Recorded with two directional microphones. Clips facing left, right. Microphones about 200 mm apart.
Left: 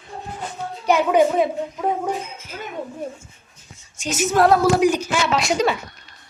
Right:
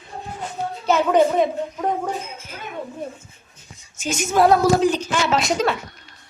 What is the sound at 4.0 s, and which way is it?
Speech, centre (ahead or behind).